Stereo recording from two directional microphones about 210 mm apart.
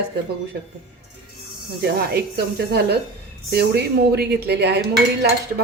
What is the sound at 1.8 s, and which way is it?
Speech, 50° right (ahead or behind).